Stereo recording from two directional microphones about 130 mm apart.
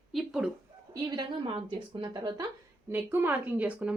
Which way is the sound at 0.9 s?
35° right (ahead or behind).